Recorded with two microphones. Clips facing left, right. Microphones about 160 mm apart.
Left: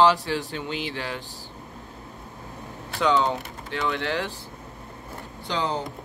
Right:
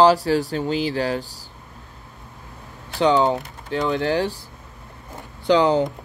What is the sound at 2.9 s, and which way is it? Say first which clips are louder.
Speech: right 5 dB; 35° right (ahead or behind).